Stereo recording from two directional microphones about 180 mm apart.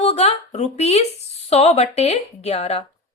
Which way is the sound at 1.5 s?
35° left (ahead or behind).